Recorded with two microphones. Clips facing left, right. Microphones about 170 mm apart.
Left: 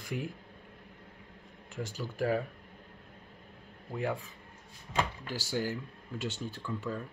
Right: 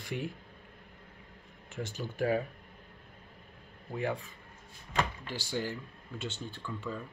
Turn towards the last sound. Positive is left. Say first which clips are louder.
# left 2 dB
turn(degrees=10)  # may be behind; listen again after turning